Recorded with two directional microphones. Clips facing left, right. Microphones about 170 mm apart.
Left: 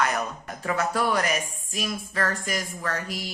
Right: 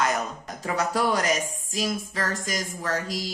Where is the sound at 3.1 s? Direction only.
90° right.